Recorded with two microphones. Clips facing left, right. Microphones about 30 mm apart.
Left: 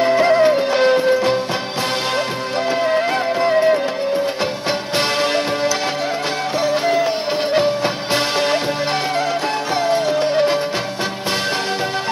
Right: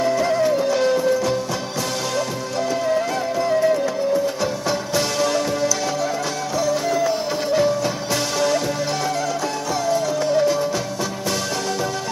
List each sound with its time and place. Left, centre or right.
0.0 s music: left
2.7 s music: left
9.8 s music: left